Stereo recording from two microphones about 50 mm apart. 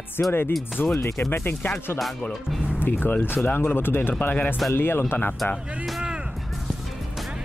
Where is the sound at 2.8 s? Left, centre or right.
Left.